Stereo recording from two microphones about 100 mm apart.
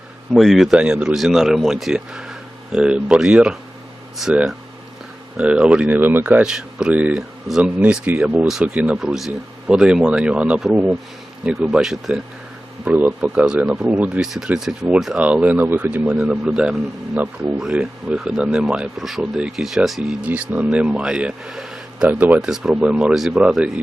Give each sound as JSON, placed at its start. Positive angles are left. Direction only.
{"t": 0.3, "sound": "speech", "side_deg": 0}
{"t": 0.8, "sound": "speech", "side_deg": -10}
{"t": 12.8, "sound": "speech", "side_deg": -20}
{"t": 22.0, "sound": "speech", "side_deg": -15}
{"t": 22.4, "sound": "speech", "side_deg": -5}